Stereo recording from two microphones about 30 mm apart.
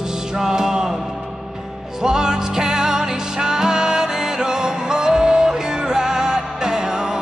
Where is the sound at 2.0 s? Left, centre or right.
Right.